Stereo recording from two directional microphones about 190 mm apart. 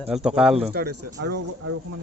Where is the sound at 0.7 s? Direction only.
55° right (ahead or behind).